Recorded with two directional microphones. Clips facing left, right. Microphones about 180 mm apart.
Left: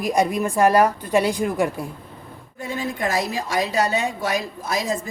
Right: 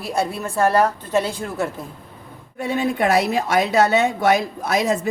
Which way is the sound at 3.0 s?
70° right (ahead or behind).